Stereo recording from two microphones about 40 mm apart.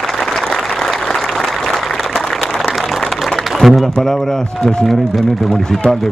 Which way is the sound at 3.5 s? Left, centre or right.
Centre.